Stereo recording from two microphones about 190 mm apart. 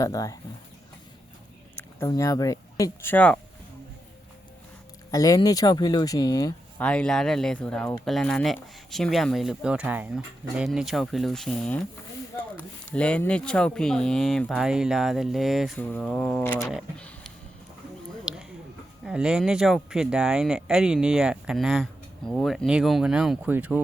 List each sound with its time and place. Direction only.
0.0 s speech: 20° left (ahead or behind)
2.0 s speech: 15° left (ahead or behind)
5.1 s speech: 20° left (ahead or behind)
6.8 s speech: 5° left (ahead or behind)
18.3 s a sound: 5° right (ahead or behind)
19.0 s speech: 5° right (ahead or behind)